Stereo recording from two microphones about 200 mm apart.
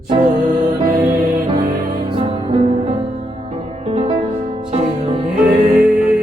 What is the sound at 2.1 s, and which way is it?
Music, 30° right (ahead or behind).